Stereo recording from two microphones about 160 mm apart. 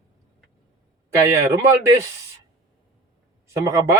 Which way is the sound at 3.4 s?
20° right (ahead or behind).